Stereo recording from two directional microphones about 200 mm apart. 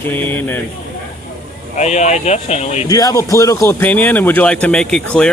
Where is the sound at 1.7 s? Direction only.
35° left (ahead or behind).